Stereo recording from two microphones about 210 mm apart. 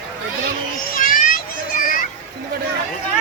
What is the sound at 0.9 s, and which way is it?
Children playing, 40° left (ahead or behind).